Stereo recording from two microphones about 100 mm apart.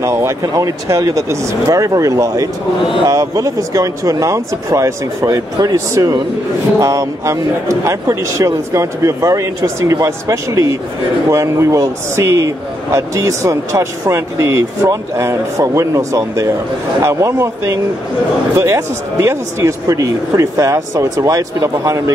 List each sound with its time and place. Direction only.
0.0 s a man's voice: 30° right (ahead or behind)
6.8 s a man's voice: 30° right (ahead or behind)